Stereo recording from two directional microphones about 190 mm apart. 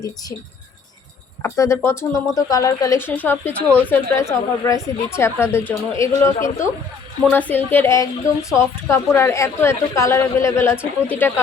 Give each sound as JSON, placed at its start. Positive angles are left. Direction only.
{"t": 1.4, "sound": "a woman's voice", "side_deg": 15}